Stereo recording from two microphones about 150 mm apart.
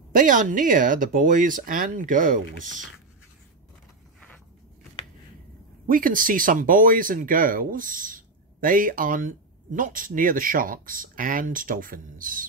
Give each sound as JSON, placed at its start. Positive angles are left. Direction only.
{"t": 0.1, "sound": "speech", "side_deg": -60}
{"t": 5.9, "sound": "speech", "side_deg": -65}